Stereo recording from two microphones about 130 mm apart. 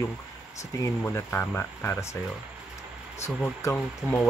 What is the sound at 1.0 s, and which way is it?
Speech, 20° left (ahead or behind).